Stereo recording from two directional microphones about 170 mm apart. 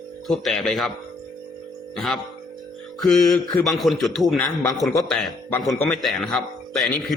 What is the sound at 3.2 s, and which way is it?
Mantra, 20° left (ahead or behind).